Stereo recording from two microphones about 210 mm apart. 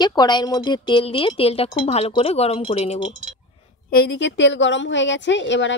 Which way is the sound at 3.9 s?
55° left (ahead or behind).